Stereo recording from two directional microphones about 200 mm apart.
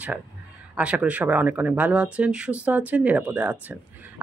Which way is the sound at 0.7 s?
5° right (ahead or behind).